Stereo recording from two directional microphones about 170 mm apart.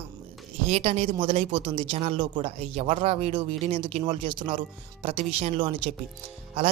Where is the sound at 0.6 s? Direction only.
40° right (ahead or behind).